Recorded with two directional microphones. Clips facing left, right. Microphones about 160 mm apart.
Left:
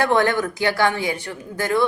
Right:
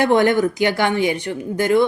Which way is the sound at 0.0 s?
15° right (ahead or behind).